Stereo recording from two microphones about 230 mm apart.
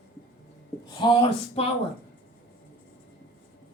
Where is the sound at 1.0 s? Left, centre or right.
Left.